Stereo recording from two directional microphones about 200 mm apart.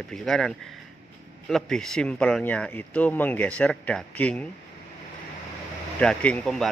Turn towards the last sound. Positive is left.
turn(degrees=5)  # may be behind; listen again after turning